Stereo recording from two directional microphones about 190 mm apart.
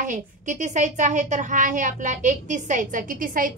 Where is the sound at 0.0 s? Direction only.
40° right (ahead or behind).